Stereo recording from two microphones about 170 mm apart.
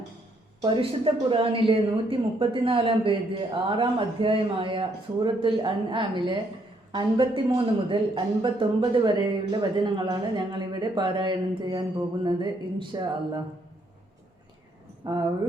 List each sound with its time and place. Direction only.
0.6 s a woman's voice: 30° right (ahead or behind)
15.0 s speech: 25° right (ahead or behind)